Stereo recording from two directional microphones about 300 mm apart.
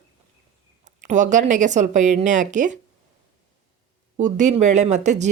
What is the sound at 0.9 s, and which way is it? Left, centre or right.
Speech, right.